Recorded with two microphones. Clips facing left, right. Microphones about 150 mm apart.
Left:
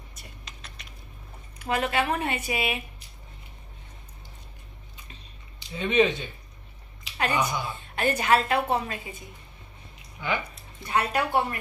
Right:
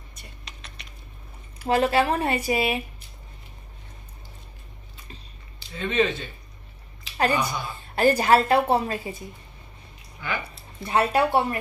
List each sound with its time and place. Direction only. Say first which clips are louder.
0.1 s typing: right 1 dB; centre (ahead or behind)
1.6 s a woman's voice: right 5 dB; 35° right (ahead or behind)
5.6 s speech: left 1 dB; 15° left (ahead or behind)
7.2 s a woman's voice: right 3 dB; 35° right (ahead or behind)
10.2 s speech: left 2 dB; 20° left (ahead or behind)
10.5 s speech: right 3 dB; 30° right (ahead or behind)